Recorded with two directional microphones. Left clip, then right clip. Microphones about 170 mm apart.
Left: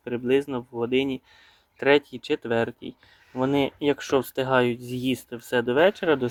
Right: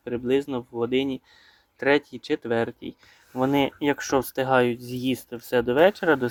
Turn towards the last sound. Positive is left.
turn(degrees=0)  # may be behind; listen again after turning